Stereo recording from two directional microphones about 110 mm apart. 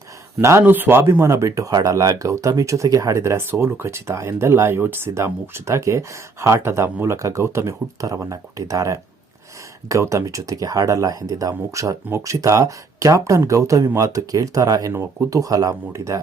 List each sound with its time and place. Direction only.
0.4 s speech: 20° right (ahead or behind)